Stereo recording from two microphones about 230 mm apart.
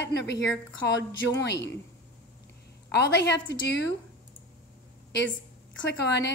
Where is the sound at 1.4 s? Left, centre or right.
Left.